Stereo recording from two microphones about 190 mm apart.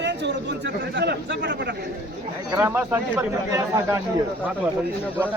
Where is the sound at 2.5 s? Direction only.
10° right (ahead or behind).